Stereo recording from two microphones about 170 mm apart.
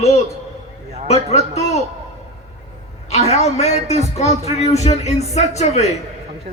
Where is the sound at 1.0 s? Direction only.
40° left (ahead or behind).